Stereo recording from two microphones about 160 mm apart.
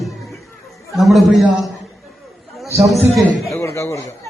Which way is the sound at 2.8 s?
Centre (ahead or behind).